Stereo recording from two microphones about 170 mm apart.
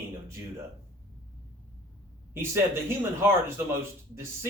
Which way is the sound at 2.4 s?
15° right (ahead or behind).